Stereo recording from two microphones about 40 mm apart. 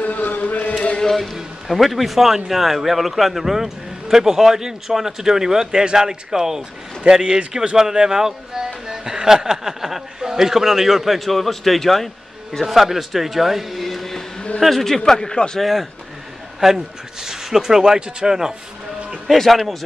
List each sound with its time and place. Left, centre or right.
0.0 s a sound: left
1.0 s a man's voice: centre
15.6 s a man's voice: centre
19.2 s speech: centre